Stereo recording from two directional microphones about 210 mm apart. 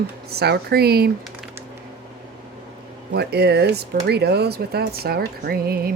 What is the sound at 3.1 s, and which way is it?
Speech, 50° right (ahead or behind).